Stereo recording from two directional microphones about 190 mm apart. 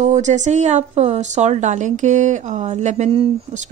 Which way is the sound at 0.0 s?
40° right (ahead or behind).